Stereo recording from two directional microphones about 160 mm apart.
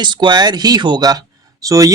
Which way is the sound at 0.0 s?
30° right (ahead or behind).